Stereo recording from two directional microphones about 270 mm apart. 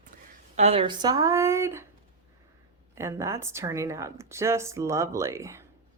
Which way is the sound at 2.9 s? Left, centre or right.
Centre.